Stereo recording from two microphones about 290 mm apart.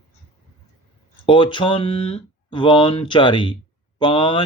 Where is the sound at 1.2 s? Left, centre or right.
Centre.